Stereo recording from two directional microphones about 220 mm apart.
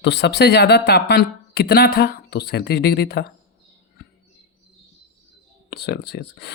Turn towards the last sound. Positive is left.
turn(degrees=50)  # may be behind; listen again after turning